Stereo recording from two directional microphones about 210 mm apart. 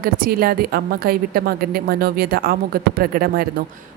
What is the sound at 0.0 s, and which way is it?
A woman's voice, 45° right (ahead or behind).